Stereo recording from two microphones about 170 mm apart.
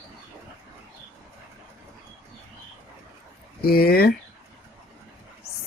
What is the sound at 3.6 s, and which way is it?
Speech, 65° left (ahead or behind).